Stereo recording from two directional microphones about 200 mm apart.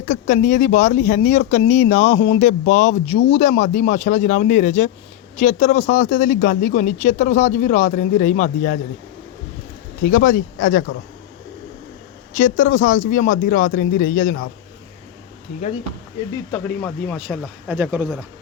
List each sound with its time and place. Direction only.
0.0 s speech: 40° left (ahead or behind)
10.1 s speech: 80° left
10.6 s speech: 45° left (ahead or behind)
12.3 s speech: 40° left (ahead or behind)
14.3 s speech: 85° left
16.5 s speech: 5° left (ahead or behind)